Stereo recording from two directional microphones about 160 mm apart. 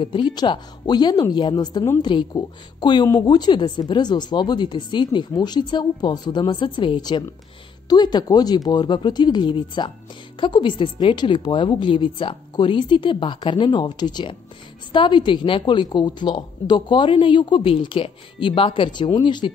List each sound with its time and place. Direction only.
0.0 s a woman's voice: 30° left (ahead or behind)